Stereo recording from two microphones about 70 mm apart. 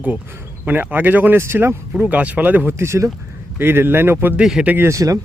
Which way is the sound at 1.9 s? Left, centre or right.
Right.